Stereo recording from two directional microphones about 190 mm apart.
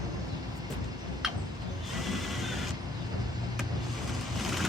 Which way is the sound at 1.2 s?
Centre (ahead or behind).